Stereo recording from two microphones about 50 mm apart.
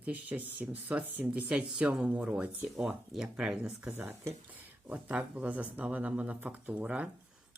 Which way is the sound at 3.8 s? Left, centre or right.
Right.